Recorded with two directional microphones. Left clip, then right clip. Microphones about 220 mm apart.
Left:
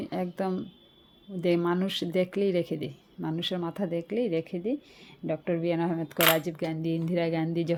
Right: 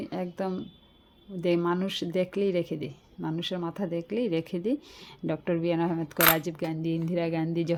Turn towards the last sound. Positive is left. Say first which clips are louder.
# even
turn(degrees=0)  # may be behind; listen again after turning